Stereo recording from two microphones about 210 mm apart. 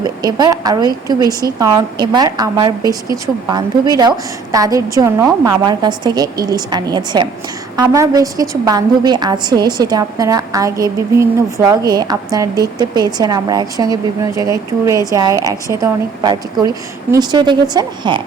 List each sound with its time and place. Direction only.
0.0 s a woman's voice: 20° right (ahead or behind)